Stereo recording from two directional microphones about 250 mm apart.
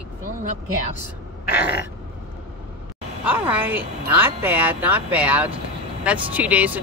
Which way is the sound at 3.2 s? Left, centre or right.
Centre.